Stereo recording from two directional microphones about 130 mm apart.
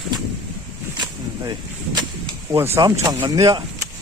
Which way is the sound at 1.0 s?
30° right (ahead or behind).